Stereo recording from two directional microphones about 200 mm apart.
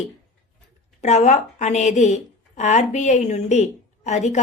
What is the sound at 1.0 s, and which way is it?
A woman's voice, 35° left (ahead or behind).